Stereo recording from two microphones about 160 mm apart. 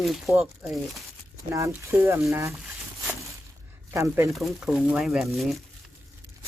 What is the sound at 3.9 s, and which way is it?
Speech, 20° right (ahead or behind).